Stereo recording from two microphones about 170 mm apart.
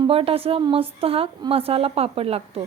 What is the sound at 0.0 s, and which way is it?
A woman's voice, 35° right (ahead or behind).